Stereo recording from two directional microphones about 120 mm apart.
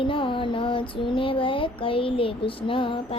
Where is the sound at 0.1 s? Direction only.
45° left (ahead or behind).